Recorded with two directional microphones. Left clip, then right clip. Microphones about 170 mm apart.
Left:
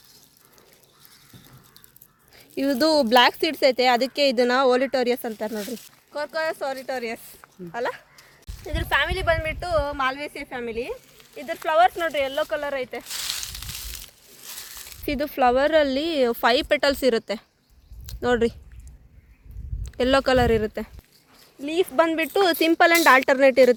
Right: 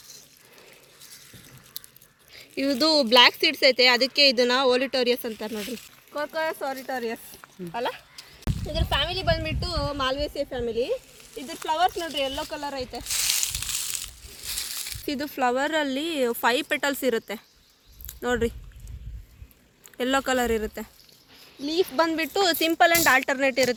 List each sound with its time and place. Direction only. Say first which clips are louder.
2.3 s speech: left 2 dB; 55° left (ahead or behind)
5.5 s speech: left 2 dB; 10° left (ahead or behind)
6.1 s speech: left 2 dB; 35° left (ahead or behind)
7.7 s speech: left 2 dB; 20° left (ahead or behind)
11.3 s speech: left 6 dB; 25° left (ahead or behind)
13.1 s a sound: right 4 dB; 10° right (ahead or behind)
15.0 s speech: left 5 dB; 90° left
18.2 s speech: left 4 dB; 70° left (ahead or behind)
20.0 s speech: left 5 dB; 85° left; by 20.9 s 65° left (ahead or behind)
21.6 s speech: left 3 dB; 85° left